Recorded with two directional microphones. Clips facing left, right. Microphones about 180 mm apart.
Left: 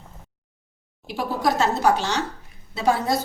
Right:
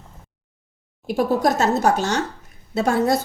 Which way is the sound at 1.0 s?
45° right (ahead or behind).